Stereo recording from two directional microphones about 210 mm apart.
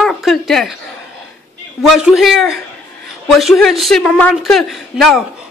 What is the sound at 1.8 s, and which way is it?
A woman's voice, centre (ahead or behind).